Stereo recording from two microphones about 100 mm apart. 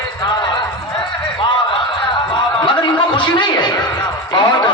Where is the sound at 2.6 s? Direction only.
55° left (ahead or behind).